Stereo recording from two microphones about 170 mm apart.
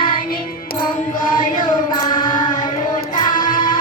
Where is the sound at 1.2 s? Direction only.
55° left (ahead or behind).